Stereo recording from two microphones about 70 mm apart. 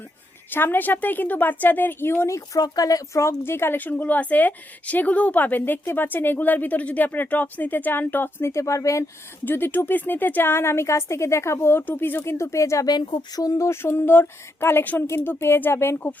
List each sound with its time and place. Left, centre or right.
0.5 s speech: left
2.6 s speech: left
9.4 s a woman's voice: left
12.9 s speech: left
13.7 s a woman's voice: left